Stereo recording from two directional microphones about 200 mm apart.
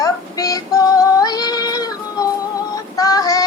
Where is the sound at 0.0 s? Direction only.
15° left (ahead or behind).